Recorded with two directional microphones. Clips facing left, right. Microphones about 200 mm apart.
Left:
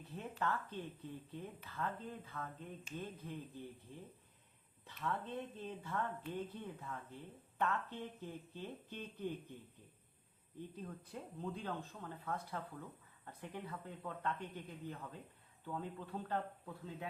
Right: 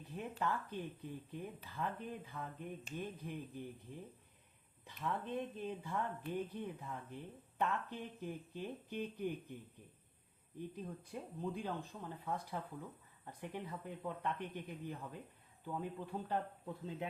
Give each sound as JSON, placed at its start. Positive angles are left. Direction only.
{"t": 0.0, "sound": "speech", "side_deg": -15}
{"t": 4.9, "sound": "speech", "side_deg": -15}
{"t": 10.8, "sound": "speech", "side_deg": -15}